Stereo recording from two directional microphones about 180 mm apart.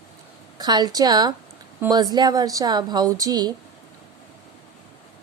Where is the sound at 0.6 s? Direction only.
25° right (ahead or behind).